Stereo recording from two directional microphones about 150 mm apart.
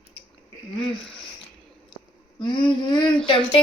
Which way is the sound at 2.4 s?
30° left (ahead or behind).